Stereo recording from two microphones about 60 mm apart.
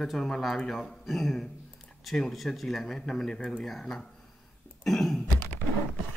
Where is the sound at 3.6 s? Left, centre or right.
Centre.